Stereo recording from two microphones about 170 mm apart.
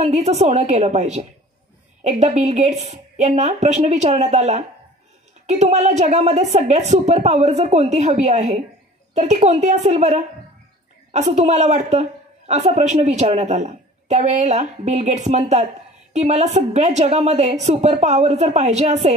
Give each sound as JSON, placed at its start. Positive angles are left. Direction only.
{"t": 0.0, "sound": "a woman's voice", "side_deg": -40}